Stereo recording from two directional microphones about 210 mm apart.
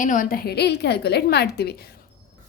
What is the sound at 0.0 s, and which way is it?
A woman's voice, 40° left (ahead or behind).